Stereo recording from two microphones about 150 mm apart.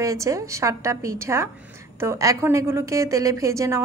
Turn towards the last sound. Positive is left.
turn(degrees=-20)  # may be behind; listen again after turning